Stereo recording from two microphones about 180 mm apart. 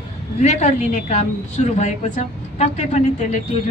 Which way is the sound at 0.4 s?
40° left (ahead or behind).